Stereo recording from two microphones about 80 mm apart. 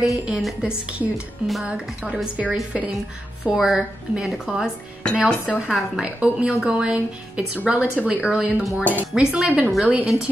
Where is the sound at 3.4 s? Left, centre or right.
Centre.